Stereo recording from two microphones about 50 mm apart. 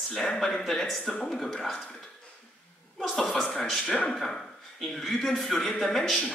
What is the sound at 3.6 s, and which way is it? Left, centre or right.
A man's voice, centre.